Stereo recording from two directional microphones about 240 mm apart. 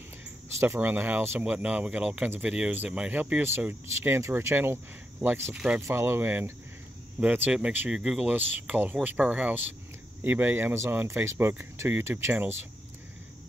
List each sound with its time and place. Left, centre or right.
0.6 s speech: centre